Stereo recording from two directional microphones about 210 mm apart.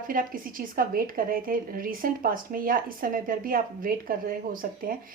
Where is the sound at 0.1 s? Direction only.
40° right (ahead or behind).